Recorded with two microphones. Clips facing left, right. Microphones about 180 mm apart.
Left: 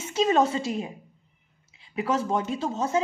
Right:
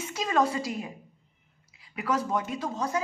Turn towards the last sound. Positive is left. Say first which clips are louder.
# left 4 dB
turn(degrees=25)  # may be behind; listen again after turning